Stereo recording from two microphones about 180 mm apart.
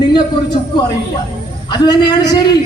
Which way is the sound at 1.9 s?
20° left (ahead or behind).